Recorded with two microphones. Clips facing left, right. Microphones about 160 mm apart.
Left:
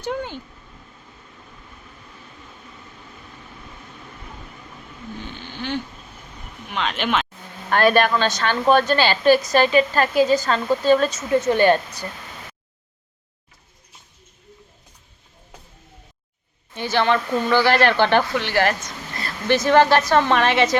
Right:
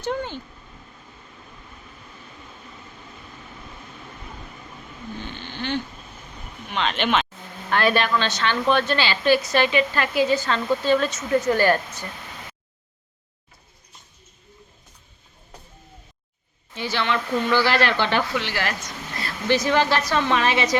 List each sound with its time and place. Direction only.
0.0 s speech: 10° left (ahead or behind)
5.2 s a sound: 10° left (ahead or behind)
6.7 s speech: 5° left (ahead or behind)
7.7 s a woman's voice: 45° left (ahead or behind)
11.3 s speech: 20° left (ahead or behind)
16.7 s a woman's voice: 50° left (ahead or behind)